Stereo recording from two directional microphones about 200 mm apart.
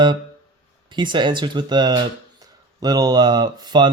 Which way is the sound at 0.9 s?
25° right (ahead or behind).